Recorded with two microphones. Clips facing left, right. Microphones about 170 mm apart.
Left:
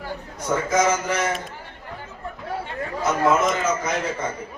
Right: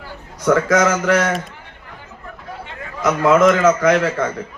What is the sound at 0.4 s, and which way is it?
Speech, 90° right.